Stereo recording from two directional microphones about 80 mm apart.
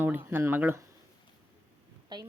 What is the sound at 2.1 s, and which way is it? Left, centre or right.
Speech, right.